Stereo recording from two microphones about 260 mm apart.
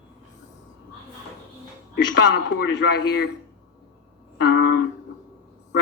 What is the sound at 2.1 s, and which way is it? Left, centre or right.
A man's voice, left.